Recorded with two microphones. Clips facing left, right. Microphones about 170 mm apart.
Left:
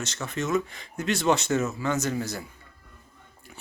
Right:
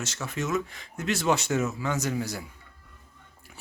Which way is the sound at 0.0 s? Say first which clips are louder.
Left 1 dB; 10° right (ahead or behind).